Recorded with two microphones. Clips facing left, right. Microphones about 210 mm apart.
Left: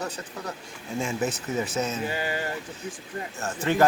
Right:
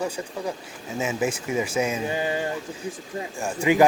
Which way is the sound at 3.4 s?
15° right (ahead or behind).